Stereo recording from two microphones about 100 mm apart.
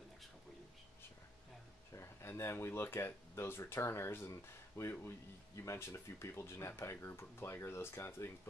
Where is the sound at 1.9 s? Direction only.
30° left (ahead or behind).